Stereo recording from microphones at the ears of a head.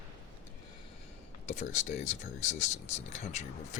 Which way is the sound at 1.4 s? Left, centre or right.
Left.